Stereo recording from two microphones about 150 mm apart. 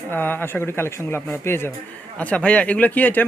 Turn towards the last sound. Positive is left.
turn(degrees=10)  # may be behind; listen again after turning